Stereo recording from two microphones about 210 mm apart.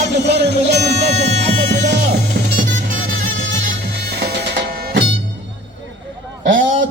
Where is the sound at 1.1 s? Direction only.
35° right (ahead or behind).